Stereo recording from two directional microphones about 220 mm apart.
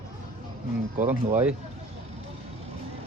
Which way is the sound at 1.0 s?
10° right (ahead or behind).